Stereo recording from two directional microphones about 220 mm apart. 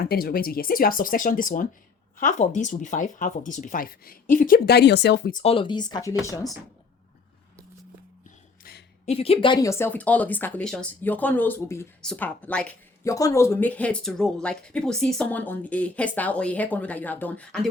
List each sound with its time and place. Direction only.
0.0 s speech: 45° left (ahead or behind)
5.4 s speech: 25° left (ahead or behind)
9.0 s speech: 25° left (ahead or behind); by 17.7 s 5° left (ahead or behind)